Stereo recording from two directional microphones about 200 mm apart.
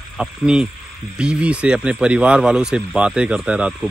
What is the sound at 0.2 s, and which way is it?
Speech, 5° right (ahead or behind).